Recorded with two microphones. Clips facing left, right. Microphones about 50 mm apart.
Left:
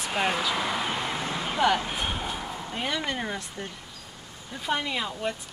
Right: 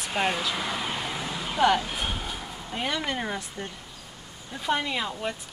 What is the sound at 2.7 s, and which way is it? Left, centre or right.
Speech, centre.